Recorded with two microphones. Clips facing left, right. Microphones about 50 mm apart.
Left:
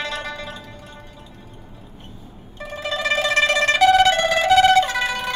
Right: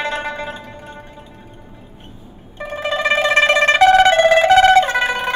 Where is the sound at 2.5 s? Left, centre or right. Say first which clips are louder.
Right 5 dB; right.